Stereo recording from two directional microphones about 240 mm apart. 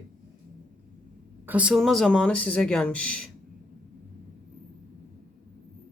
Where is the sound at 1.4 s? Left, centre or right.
Centre.